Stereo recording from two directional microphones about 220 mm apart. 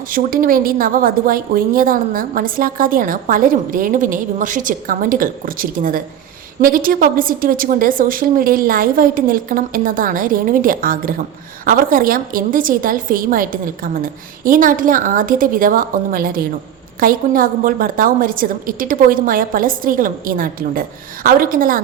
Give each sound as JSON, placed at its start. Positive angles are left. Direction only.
{"t": 0.1, "sound": "a woman's voice", "side_deg": -40}